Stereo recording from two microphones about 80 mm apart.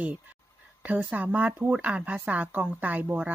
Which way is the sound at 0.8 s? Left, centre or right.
Centre.